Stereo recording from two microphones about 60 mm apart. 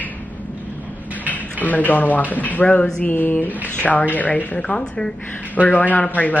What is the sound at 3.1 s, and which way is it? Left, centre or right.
Speech, left.